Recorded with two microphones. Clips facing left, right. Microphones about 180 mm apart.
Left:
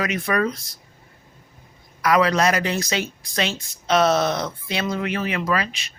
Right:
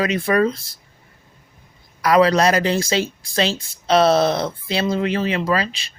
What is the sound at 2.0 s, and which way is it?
A woman's voice, 35° right (ahead or behind).